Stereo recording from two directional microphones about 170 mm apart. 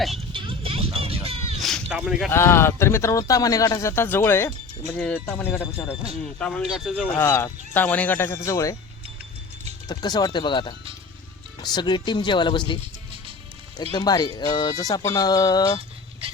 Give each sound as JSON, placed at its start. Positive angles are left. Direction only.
{"t": 0.2, "sound": "music", "side_deg": -30}
{"t": 1.5, "sound": "a sound", "side_deg": 0}
{"t": 2.3, "sound": "speech", "side_deg": 15}
{"t": 6.4, "sound": "speech", "side_deg": 5}
{"t": 7.2, "sound": "speech", "side_deg": 15}
{"t": 9.9, "sound": "speech", "side_deg": 25}
{"t": 13.9, "sound": "speech", "side_deg": 25}